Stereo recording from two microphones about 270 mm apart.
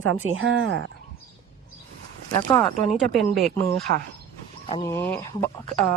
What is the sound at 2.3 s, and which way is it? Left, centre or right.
Speech, centre.